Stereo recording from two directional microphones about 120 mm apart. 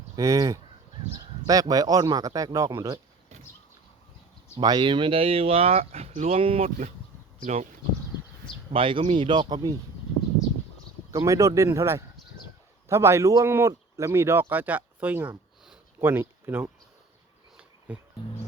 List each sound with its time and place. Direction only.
0.2 s speech: 30° right (ahead or behind)
4.6 s speech: 40° right (ahead or behind)
7.4 s speech: 80° right
8.7 s speech: 50° right (ahead or behind)
11.1 s speech: 25° right (ahead or behind)
17.9 s speech: 10° right (ahead or behind)